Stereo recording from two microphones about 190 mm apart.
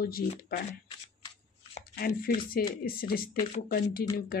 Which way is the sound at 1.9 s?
50° left (ahead or behind).